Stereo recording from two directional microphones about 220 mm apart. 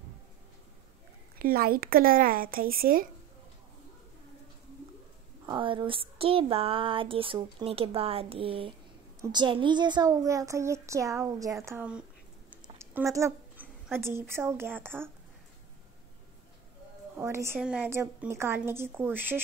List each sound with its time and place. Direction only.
1.4 s speech: 40° right (ahead or behind)
5.5 s a sound: 20° right (ahead or behind)
9.2 s a woman's voice: 20° right (ahead or behind)
12.6 s a sound: 15° right (ahead or behind)
13.8 s a woman's voice: 10° right (ahead or behind)
17.2 s a woman's voice: 10° right (ahead or behind)